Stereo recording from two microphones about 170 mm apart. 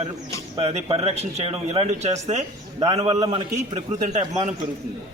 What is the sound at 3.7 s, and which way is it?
Speech, 45° right (ahead or behind).